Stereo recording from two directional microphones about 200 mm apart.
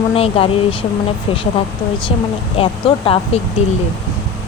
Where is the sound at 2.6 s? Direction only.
25° left (ahead or behind).